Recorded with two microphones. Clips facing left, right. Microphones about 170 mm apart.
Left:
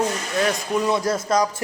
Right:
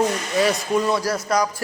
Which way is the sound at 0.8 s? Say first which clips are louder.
Left 1 dB; 20° left (ahead or behind).